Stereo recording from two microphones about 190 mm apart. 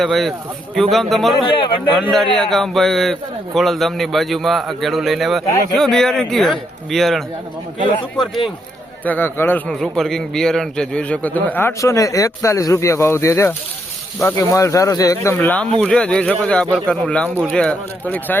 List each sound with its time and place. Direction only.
0.0 s a man's voice: centre (ahead or behind)
1.5 s speech: 25° left (ahead or behind)
2.0 s a man's voice: centre (ahead or behind)
9.0 s a man's voice: 10° left (ahead or behind)